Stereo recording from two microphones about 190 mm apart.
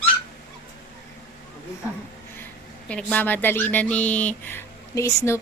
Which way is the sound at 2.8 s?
5° left (ahead or behind).